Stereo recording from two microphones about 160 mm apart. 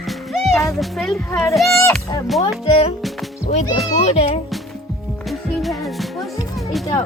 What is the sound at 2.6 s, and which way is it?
Speech, 35° left (ahead or behind).